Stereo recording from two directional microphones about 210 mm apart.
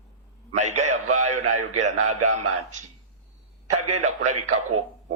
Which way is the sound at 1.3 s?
90° right.